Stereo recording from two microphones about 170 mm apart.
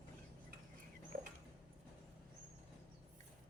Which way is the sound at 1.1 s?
65° right (ahead or behind).